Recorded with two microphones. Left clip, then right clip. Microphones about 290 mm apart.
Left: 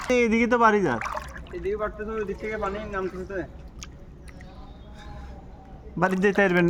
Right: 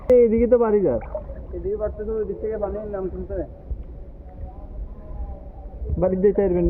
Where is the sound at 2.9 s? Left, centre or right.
Left.